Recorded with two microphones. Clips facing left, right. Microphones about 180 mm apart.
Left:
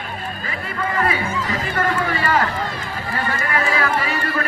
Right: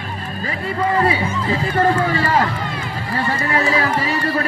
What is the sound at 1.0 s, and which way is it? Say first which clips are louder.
Speech: right 3 dB; 30° right (ahead or behind).